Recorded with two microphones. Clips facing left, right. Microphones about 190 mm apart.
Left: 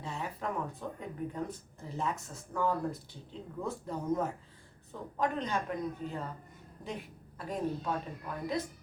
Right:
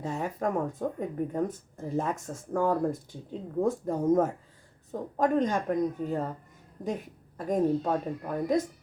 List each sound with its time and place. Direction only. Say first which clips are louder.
0.0 s speech: right 8 dB; 45° right (ahead or behind)